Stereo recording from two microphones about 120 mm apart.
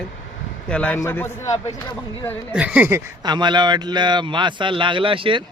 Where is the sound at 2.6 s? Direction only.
10° right (ahead or behind).